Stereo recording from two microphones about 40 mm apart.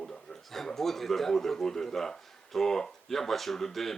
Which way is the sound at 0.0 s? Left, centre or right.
Centre.